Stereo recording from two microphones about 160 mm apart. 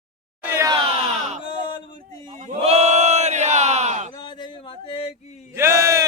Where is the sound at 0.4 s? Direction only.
15° right (ahead or behind).